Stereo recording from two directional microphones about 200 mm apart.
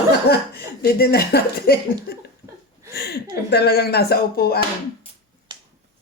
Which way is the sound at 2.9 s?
55° left (ahead or behind).